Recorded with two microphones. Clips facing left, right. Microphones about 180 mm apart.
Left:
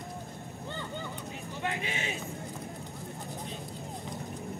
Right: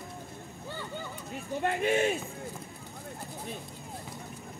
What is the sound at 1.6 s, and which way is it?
Speech, 50° right (ahead or behind).